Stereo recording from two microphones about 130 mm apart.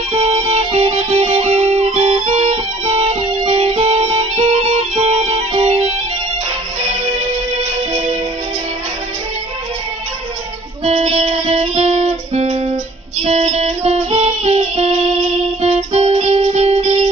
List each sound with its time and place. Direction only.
0.1 s music: 50° right (ahead or behind)
10.8 s music: 55° right (ahead or behind)